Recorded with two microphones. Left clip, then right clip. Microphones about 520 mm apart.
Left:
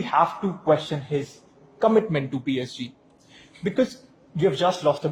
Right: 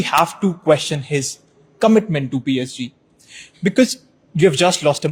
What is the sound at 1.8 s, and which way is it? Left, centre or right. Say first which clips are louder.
Speech: right 5 dB; right.